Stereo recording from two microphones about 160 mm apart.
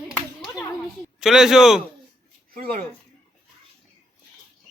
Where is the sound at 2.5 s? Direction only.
60° right (ahead or behind).